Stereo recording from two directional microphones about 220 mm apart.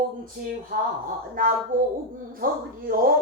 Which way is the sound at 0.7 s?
45° right (ahead or behind).